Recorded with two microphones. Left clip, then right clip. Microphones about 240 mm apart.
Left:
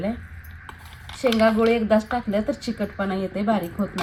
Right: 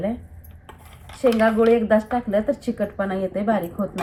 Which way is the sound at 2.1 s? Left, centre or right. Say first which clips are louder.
Right 3 dB; left.